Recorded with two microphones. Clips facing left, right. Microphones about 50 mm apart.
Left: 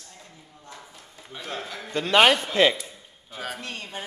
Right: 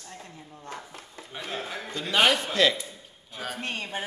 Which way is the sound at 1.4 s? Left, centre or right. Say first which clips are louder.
Even; centre.